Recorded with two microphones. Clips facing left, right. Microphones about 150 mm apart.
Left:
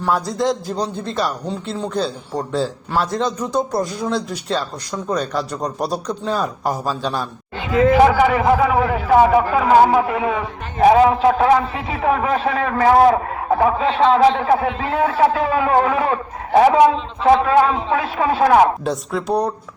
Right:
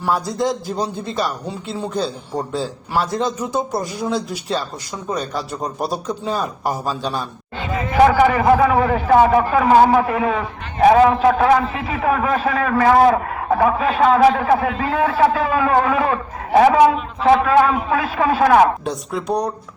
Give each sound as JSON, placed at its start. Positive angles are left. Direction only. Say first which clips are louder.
{"t": 0.1, "sound": "a man's voice", "louder": "left 1 dB", "side_deg": 0}
{"t": 8.0, "sound": "a man's voice", "louder": "right 1 dB", "side_deg": 15}
{"t": 18.9, "sound": "a man's voice", "louder": "left 2 dB", "side_deg": 0}